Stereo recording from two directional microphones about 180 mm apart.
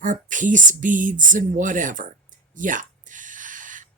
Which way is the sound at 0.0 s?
45° right (ahead or behind).